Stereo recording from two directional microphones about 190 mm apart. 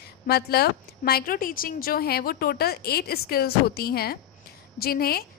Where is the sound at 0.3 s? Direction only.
55° left (ahead or behind).